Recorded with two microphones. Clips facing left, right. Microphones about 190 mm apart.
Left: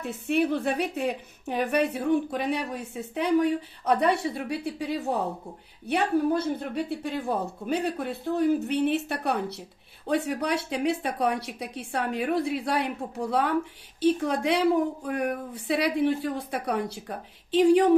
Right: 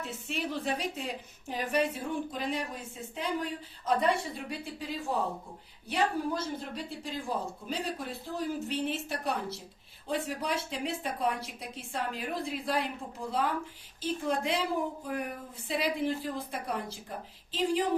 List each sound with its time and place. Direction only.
0.0 s a woman's voice: 60° left (ahead or behind)